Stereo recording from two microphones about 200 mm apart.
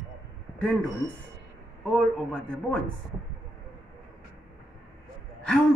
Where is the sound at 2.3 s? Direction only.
5° left (ahead or behind).